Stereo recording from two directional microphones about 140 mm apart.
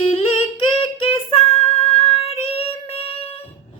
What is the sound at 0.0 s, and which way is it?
Humming, 45° left (ahead or behind).